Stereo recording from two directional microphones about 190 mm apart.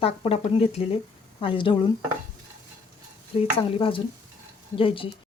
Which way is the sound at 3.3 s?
30° left (ahead or behind).